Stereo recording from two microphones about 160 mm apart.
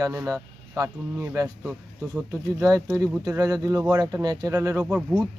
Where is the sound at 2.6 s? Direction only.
20° right (ahead or behind).